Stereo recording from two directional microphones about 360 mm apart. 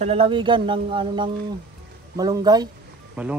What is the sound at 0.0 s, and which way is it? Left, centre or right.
Speech, centre.